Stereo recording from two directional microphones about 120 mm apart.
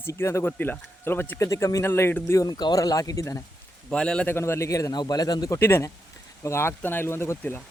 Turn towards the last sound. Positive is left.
turn(degrees=20)  # may be behind; listen again after turning